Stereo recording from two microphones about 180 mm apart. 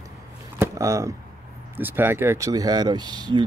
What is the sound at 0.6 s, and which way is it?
Speech, 15° right (ahead or behind).